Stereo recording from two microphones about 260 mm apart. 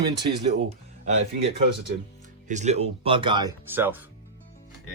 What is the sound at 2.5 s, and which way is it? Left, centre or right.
Speech, right.